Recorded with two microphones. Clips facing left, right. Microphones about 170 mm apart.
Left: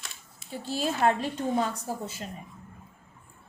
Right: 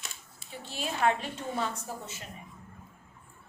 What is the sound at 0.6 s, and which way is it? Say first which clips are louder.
Speech: left 3 dB; 35° left (ahead or behind).